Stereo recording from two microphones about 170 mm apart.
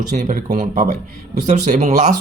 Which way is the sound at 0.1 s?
45° right (ahead or behind).